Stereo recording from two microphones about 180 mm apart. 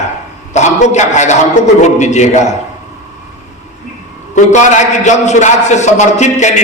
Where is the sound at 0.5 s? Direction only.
40° left (ahead or behind).